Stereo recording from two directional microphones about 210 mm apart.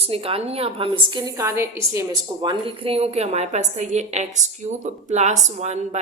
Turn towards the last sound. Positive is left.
turn(degrees=-30)  # may be behind; listen again after turning